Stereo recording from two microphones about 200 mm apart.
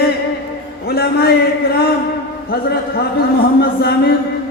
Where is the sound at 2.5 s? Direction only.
50° left (ahead or behind).